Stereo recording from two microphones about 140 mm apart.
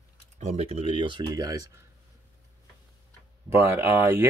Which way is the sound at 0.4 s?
55° right (ahead or behind).